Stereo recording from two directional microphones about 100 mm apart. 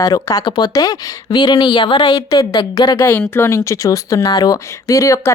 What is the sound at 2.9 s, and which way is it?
Speech, 20° left (ahead or behind).